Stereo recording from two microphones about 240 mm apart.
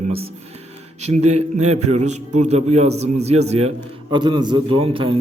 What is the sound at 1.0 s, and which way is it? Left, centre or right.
A man's voice, right.